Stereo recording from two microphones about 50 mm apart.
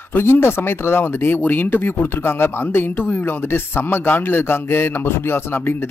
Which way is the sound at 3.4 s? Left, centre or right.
Left.